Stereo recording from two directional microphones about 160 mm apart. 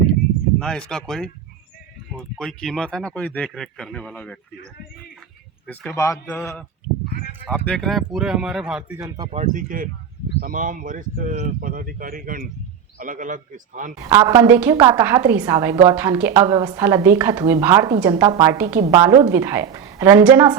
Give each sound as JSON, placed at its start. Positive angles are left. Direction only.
{"t": 0.6, "sound": "speech", "side_deg": 5}
{"t": 7.5, "sound": "speech", "side_deg": 5}
{"t": 9.0, "sound": "a woman's voice", "side_deg": -20}
{"t": 9.5, "sound": "speech", "side_deg": -60}
{"t": 14.0, "sound": "a woman's voice", "side_deg": -20}
{"t": 18.9, "sound": "a woman's voice", "side_deg": -25}